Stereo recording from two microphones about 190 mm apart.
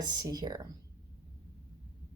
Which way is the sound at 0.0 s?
20° right (ahead or behind).